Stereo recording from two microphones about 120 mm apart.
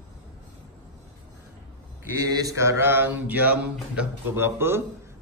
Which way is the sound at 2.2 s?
30° right (ahead or behind).